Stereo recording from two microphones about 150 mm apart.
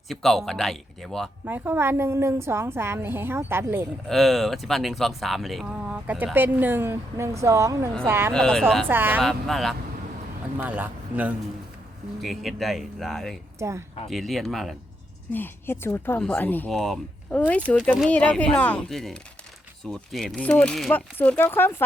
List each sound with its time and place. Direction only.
0.1 s speech: centre (ahead or behind)
1.5 s speech: 15° right (ahead or behind)
4.1 s speech: centre (ahead or behind); by 8.3 s 15° right (ahead or behind)
8.3 s speech: 5° left (ahead or behind)
8.9 s speech: 15° right (ahead or behind)
9.2 s speech: centre (ahead or behind)
10.6 s speech: 15° right (ahead or behind)
12.2 s speech: centre (ahead or behind)
13.6 s speech: 20° right (ahead or behind)
14.1 s speech: centre (ahead or behind)
15.3 s speech: 15° left (ahead or behind)